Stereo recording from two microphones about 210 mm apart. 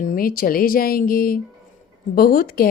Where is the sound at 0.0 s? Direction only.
40° left (ahead or behind).